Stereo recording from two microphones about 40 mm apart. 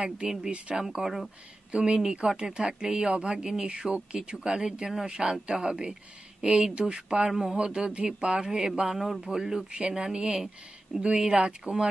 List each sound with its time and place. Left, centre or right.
0.0 s speech: centre
1.7 s speech: right
7.2 s speech: centre
7.5 s speech: right
8.5 s speech: centre
8.8 s a man's voice: centre
9.7 s speech: right